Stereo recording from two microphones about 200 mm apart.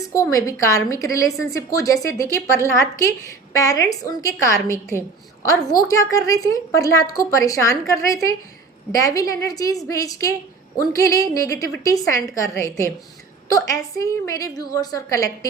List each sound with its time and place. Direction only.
0.1 s a woman's voice: 15° left (ahead or behind)